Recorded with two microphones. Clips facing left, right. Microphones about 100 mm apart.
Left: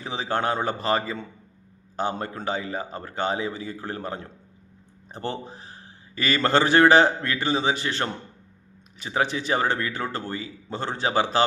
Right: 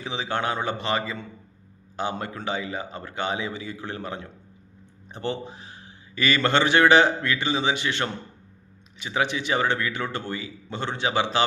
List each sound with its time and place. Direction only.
0.0 s a man's voice: 40° left (ahead or behind)